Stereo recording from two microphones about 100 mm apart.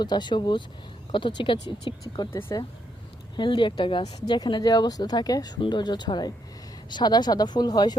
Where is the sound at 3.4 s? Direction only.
50° left (ahead or behind).